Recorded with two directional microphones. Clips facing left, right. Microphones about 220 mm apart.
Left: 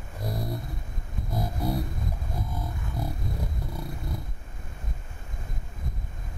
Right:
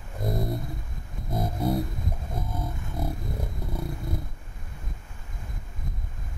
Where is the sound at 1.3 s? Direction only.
25° right (ahead or behind).